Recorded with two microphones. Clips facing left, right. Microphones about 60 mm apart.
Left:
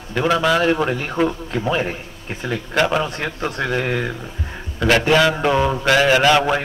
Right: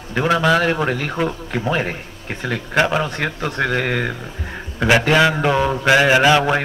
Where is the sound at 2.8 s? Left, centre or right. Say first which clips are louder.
Left 2 dB; centre.